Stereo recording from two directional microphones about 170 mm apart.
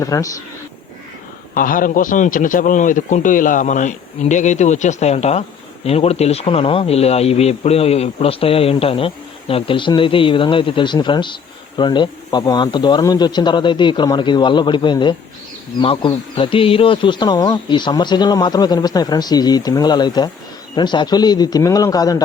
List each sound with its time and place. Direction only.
0.0 s speech: 20° left (ahead or behind)
1.5 s a man's voice: 55° left (ahead or behind); by 22.2 s 20° left (ahead or behind)